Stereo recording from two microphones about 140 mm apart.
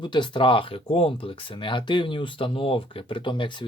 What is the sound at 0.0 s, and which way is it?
Speech, 35° left (ahead or behind).